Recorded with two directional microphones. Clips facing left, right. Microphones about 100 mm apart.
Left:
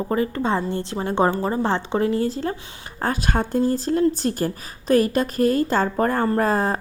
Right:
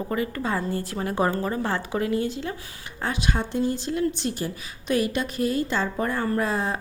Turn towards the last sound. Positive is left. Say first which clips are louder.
# left 5 dB
turn(degrees=40)  # may be behind; listen again after turning